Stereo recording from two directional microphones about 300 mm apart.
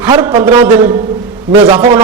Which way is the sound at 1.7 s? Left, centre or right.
Centre.